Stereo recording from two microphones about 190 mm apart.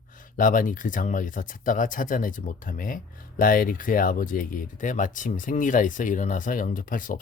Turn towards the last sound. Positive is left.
turn(degrees=45)  # may be behind; listen again after turning